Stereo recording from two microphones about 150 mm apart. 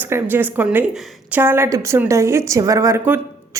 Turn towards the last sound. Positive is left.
turn(degrees=-20)  # may be behind; listen again after turning